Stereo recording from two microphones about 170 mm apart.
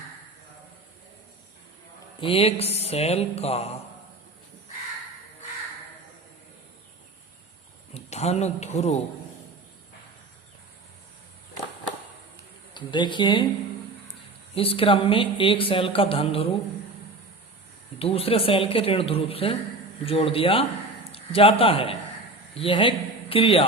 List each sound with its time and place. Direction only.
2.2 s speech: 35° left (ahead or behind)
7.9 s speech: 40° left (ahead or behind)
12.7 s speech: 25° left (ahead or behind)
14.5 s speech: 35° left (ahead or behind)
18.0 s a man's voice: 35° left (ahead or behind)